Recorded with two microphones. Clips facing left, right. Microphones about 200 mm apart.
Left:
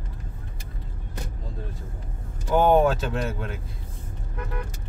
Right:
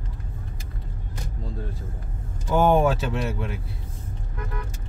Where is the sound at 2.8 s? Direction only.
10° right (ahead or behind).